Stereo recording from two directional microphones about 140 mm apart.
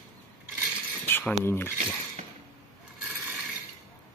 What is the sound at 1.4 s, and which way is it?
Speech, 15° left (ahead or behind).